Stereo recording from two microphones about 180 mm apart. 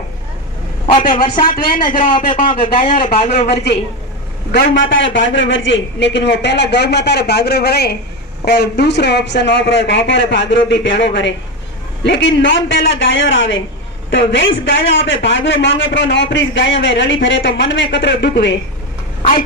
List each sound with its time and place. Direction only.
0.8 s speech: 45° left (ahead or behind)
2.1 s speech: 30° left (ahead or behind)
4.5 s a man's voice: 75° left (ahead or behind)